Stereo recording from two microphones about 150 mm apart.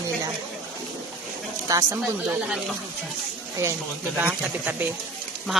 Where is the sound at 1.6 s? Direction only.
20° right (ahead or behind).